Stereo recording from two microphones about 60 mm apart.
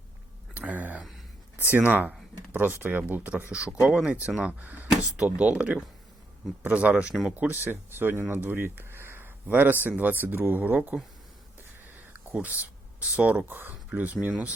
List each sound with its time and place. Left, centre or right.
0.5 s a sound: right
1.5 s speech: right
7.3 s speech: right
8.4 s a sound: right
10.0 s speech: right
12.3 s speech: right
13.5 s speech: right